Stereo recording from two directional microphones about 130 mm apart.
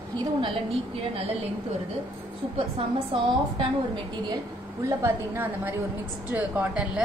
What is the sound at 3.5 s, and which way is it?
Speech, 40° right (ahead or behind).